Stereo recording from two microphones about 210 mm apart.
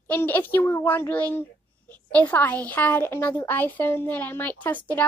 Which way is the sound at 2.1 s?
5° left (ahead or behind).